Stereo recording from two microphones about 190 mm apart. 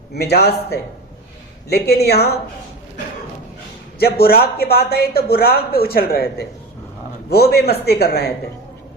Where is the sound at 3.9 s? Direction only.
55° left (ahead or behind).